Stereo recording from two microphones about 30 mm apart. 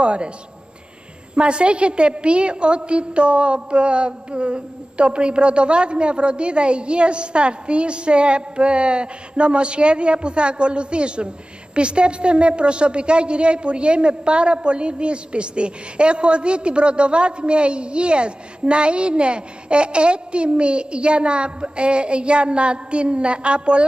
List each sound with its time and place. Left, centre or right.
0.0 s a woman's voice: right
1.3 s a woman's voice: right